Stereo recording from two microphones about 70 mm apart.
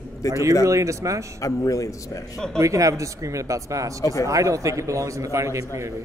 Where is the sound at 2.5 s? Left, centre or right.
Right.